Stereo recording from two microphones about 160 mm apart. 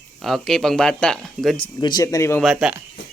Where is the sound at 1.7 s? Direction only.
25° left (ahead or behind).